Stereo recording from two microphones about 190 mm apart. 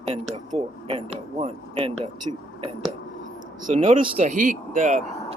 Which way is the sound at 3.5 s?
40° right (ahead or behind).